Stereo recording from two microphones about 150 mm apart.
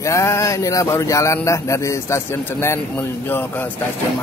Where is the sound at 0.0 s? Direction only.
20° left (ahead or behind).